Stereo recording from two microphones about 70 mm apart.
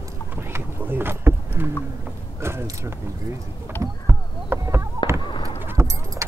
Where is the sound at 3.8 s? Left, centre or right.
Right.